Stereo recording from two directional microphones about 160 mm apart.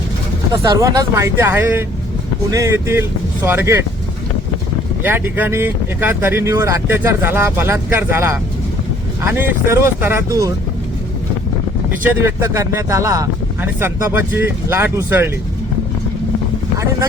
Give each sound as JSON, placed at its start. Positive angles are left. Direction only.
{"t": 0.5, "sound": "speech", "side_deg": -20}
{"t": 5.0, "sound": "speech", "side_deg": -15}
{"t": 12.0, "sound": "speech", "side_deg": -15}
{"t": 16.7, "sound": "speech", "side_deg": -20}